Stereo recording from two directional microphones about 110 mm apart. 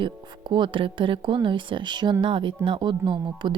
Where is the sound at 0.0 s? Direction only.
45° right (ahead or behind).